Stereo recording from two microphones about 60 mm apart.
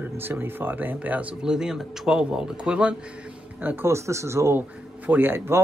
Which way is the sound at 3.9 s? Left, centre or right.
Right.